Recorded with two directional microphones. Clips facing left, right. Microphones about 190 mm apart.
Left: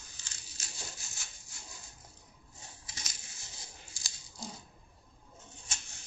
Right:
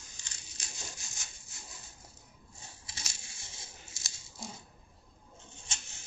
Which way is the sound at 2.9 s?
25° right (ahead or behind).